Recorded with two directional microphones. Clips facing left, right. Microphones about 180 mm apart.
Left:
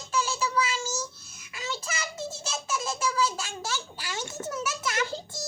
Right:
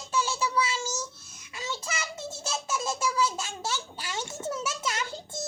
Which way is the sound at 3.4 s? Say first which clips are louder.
Right 1 dB; 25° right (ahead or behind).